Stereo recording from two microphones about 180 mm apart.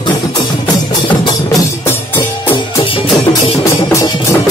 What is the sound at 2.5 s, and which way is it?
Music, 30° left (ahead or behind).